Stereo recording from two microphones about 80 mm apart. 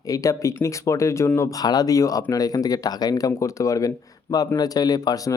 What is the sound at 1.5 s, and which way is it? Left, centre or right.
Speech, left.